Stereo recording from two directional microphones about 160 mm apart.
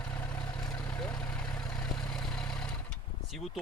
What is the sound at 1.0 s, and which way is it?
Vehicle, 5° left (ahead or behind).